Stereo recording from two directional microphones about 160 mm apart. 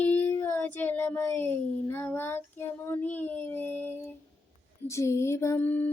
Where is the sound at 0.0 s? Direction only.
10° left (ahead or behind).